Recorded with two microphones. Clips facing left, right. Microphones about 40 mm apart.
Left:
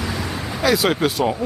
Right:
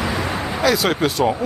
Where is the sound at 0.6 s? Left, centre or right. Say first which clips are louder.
Even; centre.